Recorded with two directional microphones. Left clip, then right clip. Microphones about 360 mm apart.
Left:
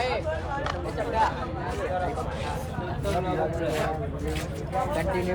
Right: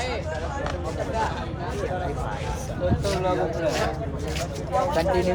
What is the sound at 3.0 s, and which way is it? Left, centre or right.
Speech, right.